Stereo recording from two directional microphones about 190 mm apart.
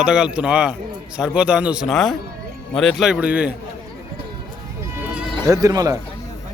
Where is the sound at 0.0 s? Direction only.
5° right (ahead or behind).